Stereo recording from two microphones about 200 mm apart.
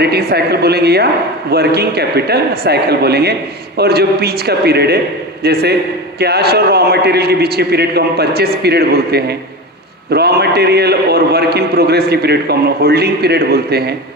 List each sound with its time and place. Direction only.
0.0 s a man's voice: 55° right (ahead or behind)